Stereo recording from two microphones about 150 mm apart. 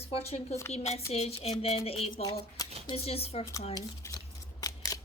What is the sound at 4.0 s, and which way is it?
Scissors, 25° left (ahead or behind).